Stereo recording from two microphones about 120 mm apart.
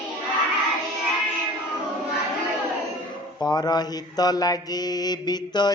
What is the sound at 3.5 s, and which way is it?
Mantra, 35° left (ahead or behind).